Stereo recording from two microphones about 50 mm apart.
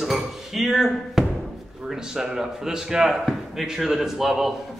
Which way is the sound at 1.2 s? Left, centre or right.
Centre.